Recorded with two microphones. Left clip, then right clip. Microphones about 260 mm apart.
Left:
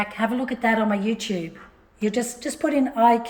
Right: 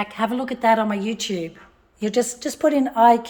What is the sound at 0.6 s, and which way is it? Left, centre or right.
A woman's voice, centre.